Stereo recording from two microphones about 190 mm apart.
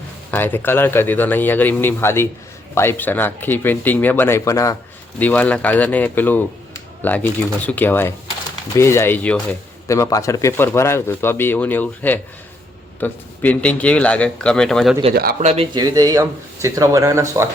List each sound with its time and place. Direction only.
0.3 s speech: 10° left (ahead or behind)
15.1 s speech: 55° right (ahead or behind)
15.4 s speech: 35° right (ahead or behind)
15.7 s speech: 20° right (ahead or behind)